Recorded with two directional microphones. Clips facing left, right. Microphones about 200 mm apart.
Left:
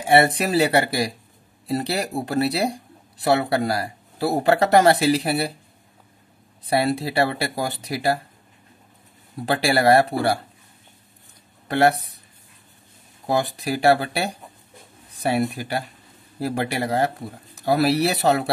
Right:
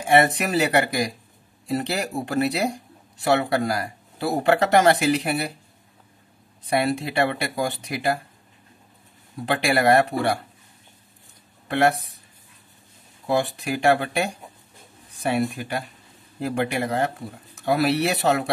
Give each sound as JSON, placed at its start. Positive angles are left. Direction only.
{"t": 0.0, "sound": "speech", "side_deg": 30}
{"t": 6.6, "sound": "speech", "side_deg": 35}
{"t": 9.5, "sound": "speech", "side_deg": 35}
{"t": 11.6, "sound": "speech", "side_deg": 35}
{"t": 13.4, "sound": "speech", "side_deg": 35}